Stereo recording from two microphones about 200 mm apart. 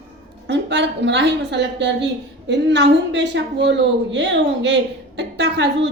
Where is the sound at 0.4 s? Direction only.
60° right (ahead or behind).